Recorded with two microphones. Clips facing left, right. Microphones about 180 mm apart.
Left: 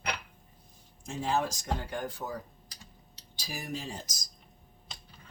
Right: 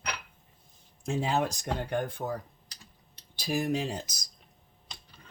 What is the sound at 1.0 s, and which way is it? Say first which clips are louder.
Speech: right 2 dB; 65° right (ahead or behind).